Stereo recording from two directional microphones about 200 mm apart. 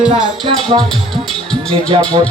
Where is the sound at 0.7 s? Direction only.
25° right (ahead or behind).